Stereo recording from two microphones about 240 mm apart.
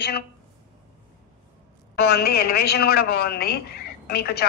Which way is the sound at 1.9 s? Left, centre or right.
Left.